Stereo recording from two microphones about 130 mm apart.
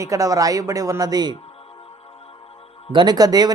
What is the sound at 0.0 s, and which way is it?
Speech, 25° right (ahead or behind).